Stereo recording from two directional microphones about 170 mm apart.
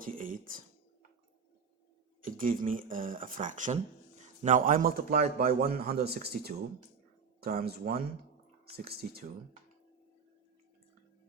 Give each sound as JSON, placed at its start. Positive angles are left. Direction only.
{"t": 0.0, "sound": "speech", "side_deg": -55}
{"t": 2.2, "sound": "a man's voice", "side_deg": -55}